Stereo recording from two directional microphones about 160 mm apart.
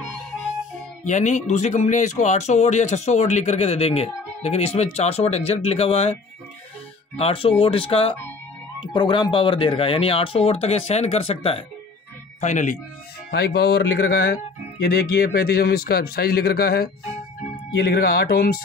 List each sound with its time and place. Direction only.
1.0 s speech: 50° left (ahead or behind)
7.2 s speech: 35° left (ahead or behind)
12.4 s speech: 50° left (ahead or behind)
13.3 s speech: 90° left; by 18.6 s 70° left (ahead or behind)